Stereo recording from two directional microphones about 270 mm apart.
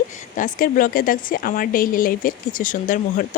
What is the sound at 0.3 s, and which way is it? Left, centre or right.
A woman's voice, left.